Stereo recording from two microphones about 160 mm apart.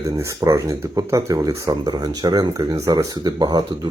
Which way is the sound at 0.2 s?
20° right (ahead or behind).